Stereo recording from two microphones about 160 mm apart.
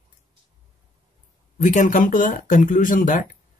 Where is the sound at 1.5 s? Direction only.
55° left (ahead or behind).